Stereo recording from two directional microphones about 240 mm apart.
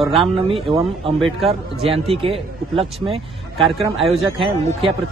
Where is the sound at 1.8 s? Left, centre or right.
Right.